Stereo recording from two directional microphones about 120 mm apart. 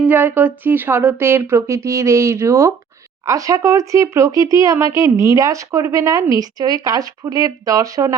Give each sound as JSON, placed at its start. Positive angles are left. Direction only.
{"t": 0.0, "sound": "speech", "side_deg": -15}